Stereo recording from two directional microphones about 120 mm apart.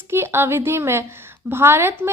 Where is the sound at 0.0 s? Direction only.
20° right (ahead or behind).